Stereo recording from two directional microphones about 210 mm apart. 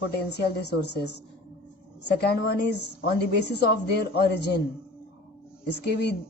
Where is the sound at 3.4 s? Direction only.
50° left (ahead or behind).